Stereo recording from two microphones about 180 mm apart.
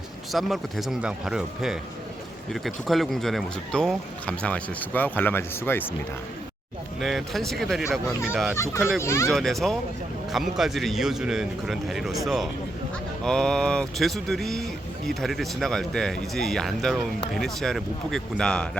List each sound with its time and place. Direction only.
0.3 s speech: centre (ahead or behind)
7.0 s speech: centre (ahead or behind)
8.5 s speech: 15° left (ahead or behind)
9.3 s speech: centre (ahead or behind)